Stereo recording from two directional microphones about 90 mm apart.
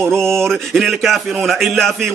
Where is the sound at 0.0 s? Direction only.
30° right (ahead or behind).